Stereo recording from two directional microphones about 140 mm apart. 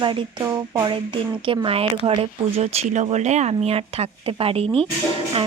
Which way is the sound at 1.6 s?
40° right (ahead or behind).